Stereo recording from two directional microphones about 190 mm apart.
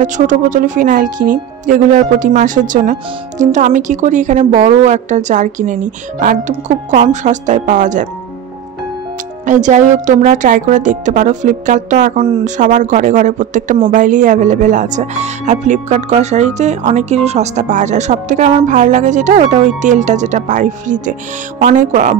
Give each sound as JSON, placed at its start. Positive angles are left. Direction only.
{"t": 0.0, "sound": "speech", "side_deg": -40}
{"t": 9.5, "sound": "speech", "side_deg": -40}